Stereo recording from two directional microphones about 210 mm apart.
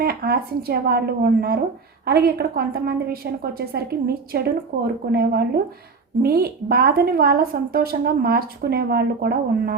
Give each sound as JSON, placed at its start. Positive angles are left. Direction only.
{"t": 0.0, "sound": "a woman's voice", "side_deg": -50}